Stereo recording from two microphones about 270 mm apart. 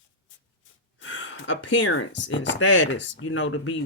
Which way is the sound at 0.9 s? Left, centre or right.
Left.